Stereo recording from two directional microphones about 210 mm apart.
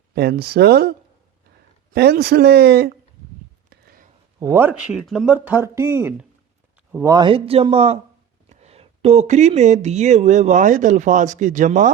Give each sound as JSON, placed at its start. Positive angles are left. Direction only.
{"t": 0.1, "sound": "speech", "side_deg": -50}
{"t": 3.7, "sound": "a sound", "side_deg": -45}
{"t": 4.4, "sound": "a man's voice", "side_deg": -15}